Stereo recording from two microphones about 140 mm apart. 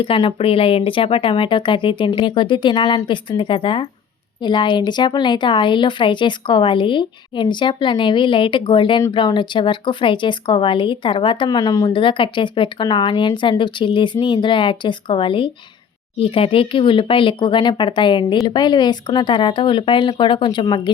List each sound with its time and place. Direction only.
0.0 s speech: 35° left (ahead or behind)
11.9 s speech: 35° left (ahead or behind)